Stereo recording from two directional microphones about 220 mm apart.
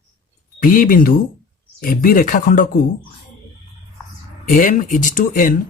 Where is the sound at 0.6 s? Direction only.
40° left (ahead or behind).